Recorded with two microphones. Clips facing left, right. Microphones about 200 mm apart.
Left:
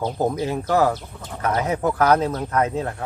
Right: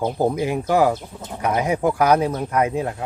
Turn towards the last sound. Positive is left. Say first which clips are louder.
# right 1 dB
turn(degrees=-15)  # may be behind; listen again after turning